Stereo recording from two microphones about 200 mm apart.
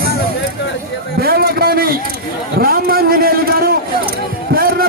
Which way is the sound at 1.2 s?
50° right (ahead or behind).